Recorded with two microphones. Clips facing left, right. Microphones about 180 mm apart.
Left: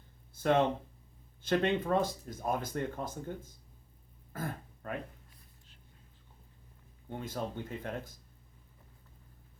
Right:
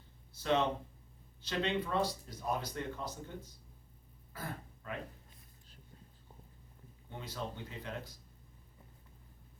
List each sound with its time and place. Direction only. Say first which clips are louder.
0.3 s speech: left 4 dB; 50° left (ahead or behind)
4.3 s throat clearing: left 5 dB; 50° left (ahead or behind)
7.1 s speech: left 5 dB; 50° left (ahead or behind)